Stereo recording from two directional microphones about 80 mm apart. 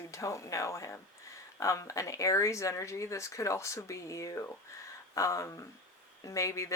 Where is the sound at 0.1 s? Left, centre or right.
Left.